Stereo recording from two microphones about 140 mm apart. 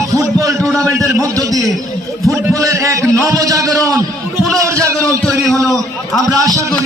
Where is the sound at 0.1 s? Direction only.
20° right (ahead or behind).